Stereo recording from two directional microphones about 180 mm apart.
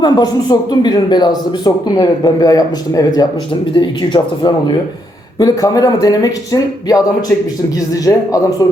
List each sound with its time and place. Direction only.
0.0 s a man's voice: 20° left (ahead or behind)
8.0 s a man's voice: 20° left (ahead or behind)